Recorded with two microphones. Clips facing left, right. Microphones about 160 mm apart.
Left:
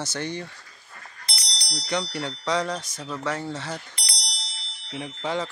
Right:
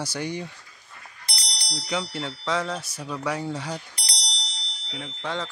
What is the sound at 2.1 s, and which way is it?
Speech, centre (ahead or behind).